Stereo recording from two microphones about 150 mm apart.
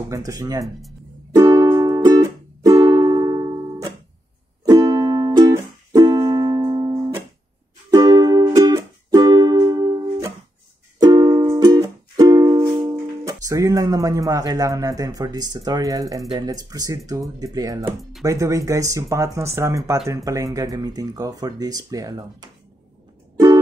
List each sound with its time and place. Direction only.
0.1 s speech: 20° right (ahead or behind)
1.3 s music: 25° right (ahead or behind)
12.8 s speech: 20° right (ahead or behind)
23.3 s music: 25° right (ahead or behind)